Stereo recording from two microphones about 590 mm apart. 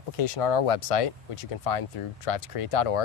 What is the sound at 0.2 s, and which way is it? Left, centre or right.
Speech, left.